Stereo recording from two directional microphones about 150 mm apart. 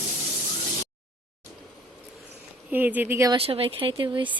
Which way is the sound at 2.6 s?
10° right (ahead or behind).